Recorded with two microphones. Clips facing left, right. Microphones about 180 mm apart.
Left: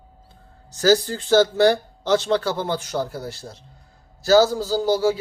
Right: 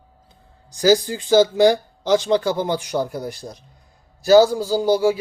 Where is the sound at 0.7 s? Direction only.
15° right (ahead or behind).